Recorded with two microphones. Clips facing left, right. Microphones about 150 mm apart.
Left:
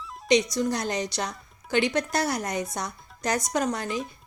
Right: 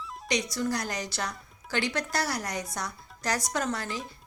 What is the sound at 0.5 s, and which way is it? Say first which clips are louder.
A woman's voice: left 4 dB; 20° left (ahead or behind).